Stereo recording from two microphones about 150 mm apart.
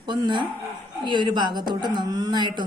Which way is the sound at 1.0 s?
30° right (ahead or behind).